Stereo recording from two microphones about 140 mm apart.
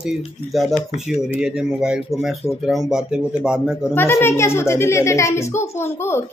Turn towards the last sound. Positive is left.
turn(degrees=15)  # may be behind; listen again after turning